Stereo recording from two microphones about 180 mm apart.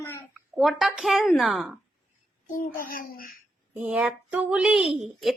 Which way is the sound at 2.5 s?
50° left (ahead or behind).